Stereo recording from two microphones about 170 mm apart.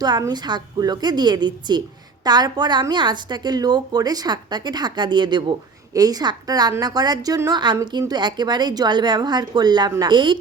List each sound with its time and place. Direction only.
0.0 s a woman's voice: 25° right (ahead or behind)